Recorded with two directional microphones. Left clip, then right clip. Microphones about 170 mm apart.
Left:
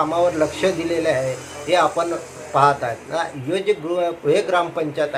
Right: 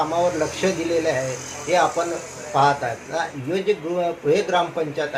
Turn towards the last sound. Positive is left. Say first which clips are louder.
# left 2 dB
turn(degrees=15)  # may be behind; listen again after turning